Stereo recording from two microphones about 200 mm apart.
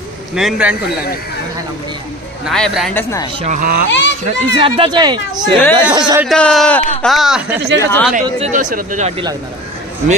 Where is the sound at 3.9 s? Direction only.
65° left (ahead or behind).